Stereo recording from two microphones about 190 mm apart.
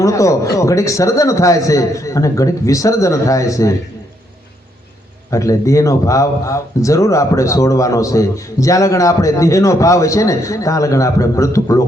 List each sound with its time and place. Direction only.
0.0 s speech: 15° left (ahead or behind)
5.3 s speech: 15° left (ahead or behind)